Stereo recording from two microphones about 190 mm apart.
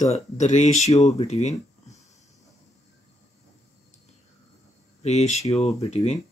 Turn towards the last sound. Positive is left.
turn(degrees=35)  # may be behind; listen again after turning